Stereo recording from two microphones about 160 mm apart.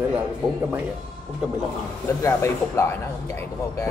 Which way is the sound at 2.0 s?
20° left (ahead or behind).